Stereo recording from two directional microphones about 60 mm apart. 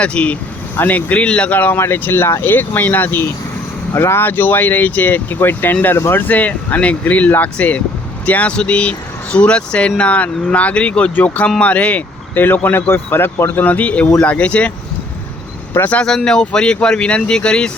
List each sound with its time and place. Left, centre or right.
0.0 s speech: centre
1.8 s speech: left
3.9 s speech: left; by 14.7 s centre
16.0 s speech: centre